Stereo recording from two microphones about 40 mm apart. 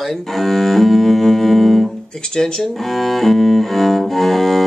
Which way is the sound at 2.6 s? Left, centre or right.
Centre.